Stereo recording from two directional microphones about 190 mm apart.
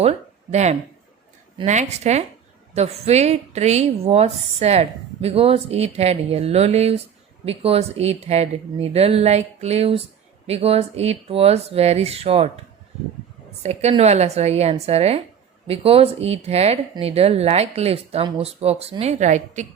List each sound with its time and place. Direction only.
0.0 s a sound: 35° right (ahead or behind)
1.6 s speech: 40° right (ahead or behind)
13.6 s speech: 35° right (ahead or behind)